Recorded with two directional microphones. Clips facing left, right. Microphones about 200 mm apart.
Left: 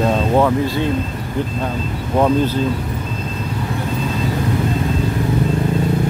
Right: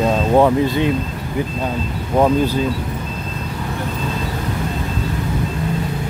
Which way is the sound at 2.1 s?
10° right (ahead or behind).